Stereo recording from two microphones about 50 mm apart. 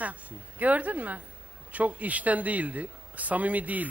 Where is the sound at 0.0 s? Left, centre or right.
Right.